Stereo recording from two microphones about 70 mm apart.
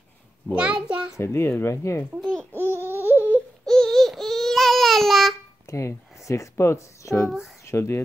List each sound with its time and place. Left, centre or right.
0.5 s a child's voice: centre
1.1 s speech: left
2.6 s a sound: right
3.6 s baby cry: centre
5.7 s speech: left